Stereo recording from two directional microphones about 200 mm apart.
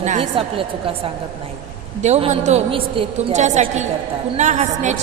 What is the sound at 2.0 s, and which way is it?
A woman's voice, 35° right (ahead or behind).